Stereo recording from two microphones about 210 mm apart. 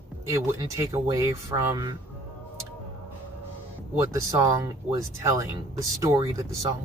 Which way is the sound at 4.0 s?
15° right (ahead or behind).